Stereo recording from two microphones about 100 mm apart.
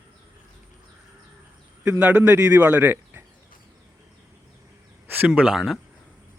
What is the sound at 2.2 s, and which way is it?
Speech, 30° right (ahead or behind).